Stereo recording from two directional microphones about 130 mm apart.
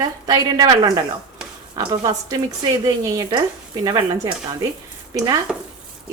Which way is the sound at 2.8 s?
30° right (ahead or behind).